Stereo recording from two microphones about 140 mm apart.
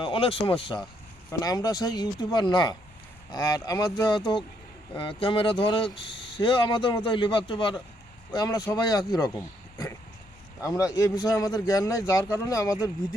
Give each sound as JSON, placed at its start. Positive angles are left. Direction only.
{"t": 0.0, "sound": "speech", "side_deg": 40}
{"t": 1.3, "sound": "a man's voice", "side_deg": 25}